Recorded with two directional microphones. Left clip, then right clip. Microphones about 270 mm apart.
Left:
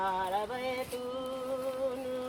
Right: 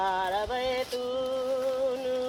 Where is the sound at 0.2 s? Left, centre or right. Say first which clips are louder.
Right 4 dB; right.